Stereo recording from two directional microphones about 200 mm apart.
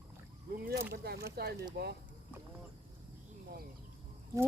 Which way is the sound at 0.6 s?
50° right (ahead or behind).